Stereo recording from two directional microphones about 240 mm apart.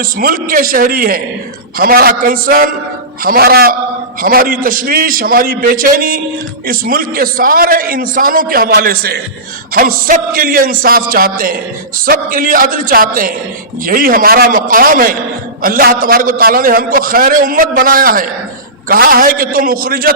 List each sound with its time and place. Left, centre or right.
0.0 s a man's voice: right